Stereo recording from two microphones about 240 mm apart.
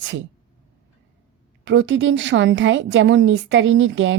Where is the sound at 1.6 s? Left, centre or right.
Right.